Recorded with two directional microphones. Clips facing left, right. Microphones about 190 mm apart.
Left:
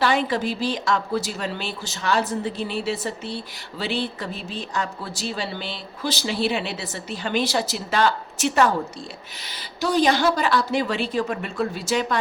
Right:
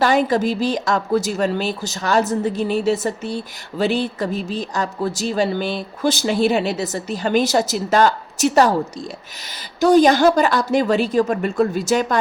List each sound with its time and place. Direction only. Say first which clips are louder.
0.0 s speech: right 5 dB; 45° right (ahead or behind)
9.8 s speech: right 7 dB; 45° right (ahead or behind)